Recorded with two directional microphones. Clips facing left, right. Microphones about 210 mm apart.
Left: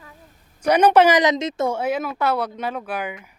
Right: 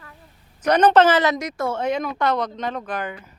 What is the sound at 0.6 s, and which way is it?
Speech, 10° left (ahead or behind).